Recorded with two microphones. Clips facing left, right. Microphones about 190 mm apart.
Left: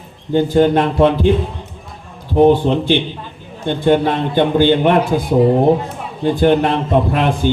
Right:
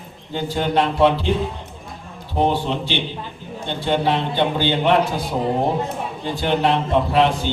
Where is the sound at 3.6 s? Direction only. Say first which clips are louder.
Left 6 dB; 50° left (ahead or behind).